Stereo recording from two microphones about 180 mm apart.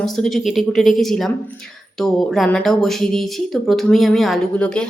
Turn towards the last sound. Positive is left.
turn(degrees=5)  # may be behind; listen again after turning